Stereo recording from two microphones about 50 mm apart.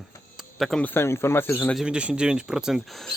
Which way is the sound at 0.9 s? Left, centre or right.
Left.